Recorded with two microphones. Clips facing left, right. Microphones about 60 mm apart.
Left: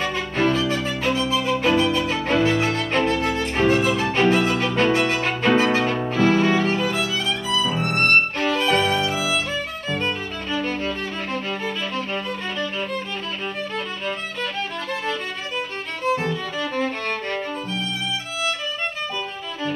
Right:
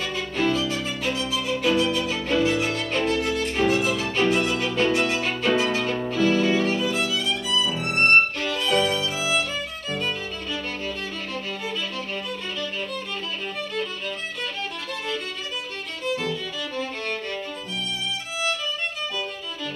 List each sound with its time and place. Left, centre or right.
0.0 s music: left